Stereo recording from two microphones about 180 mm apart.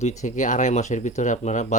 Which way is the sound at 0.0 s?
40° left (ahead or behind).